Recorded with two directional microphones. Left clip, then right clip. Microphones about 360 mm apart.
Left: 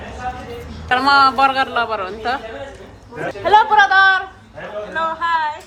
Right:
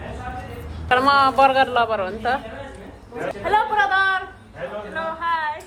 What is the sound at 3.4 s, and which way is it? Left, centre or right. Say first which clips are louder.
Speech: left 7 dB; left.